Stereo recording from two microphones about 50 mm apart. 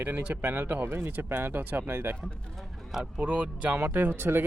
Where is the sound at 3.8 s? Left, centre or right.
Right.